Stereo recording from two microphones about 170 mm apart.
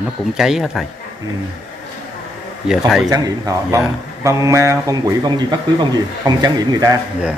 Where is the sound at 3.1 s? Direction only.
20° right (ahead or behind).